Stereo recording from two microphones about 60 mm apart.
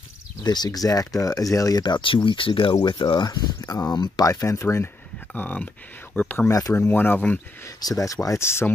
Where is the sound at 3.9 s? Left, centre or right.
Left.